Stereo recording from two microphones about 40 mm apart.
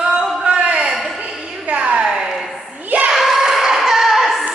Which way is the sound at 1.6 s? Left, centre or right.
Right.